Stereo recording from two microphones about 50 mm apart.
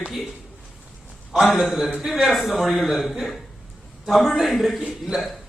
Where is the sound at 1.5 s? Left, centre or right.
Centre.